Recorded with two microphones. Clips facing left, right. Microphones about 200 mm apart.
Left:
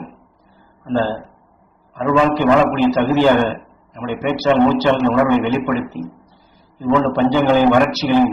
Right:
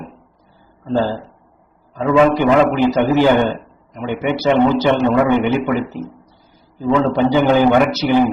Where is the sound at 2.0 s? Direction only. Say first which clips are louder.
Right 2 dB; 15° right (ahead or behind).